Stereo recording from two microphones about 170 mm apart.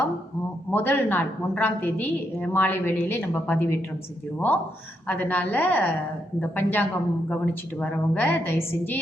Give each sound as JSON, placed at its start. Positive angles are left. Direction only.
{"t": 0.7, "sound": "a woman's voice", "side_deg": 10}